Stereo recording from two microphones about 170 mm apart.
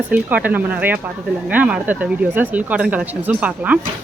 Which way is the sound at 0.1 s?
10° right (ahead or behind).